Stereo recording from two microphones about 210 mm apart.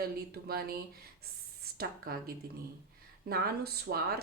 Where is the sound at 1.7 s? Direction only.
45° right (ahead or behind).